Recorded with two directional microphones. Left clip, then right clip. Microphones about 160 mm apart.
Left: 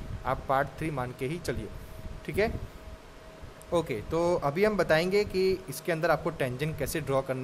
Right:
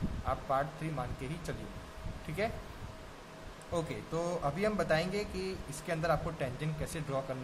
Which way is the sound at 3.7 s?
55° left (ahead or behind).